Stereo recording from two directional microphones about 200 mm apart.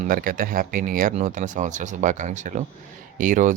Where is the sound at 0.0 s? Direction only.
45° right (ahead or behind).